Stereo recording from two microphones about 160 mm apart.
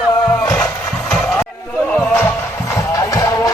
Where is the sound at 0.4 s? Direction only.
5° left (ahead or behind).